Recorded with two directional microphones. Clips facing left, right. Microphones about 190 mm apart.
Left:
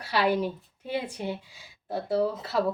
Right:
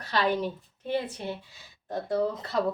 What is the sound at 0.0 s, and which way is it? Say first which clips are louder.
A woman's voice: left 2 dB; 10° left (ahead or behind).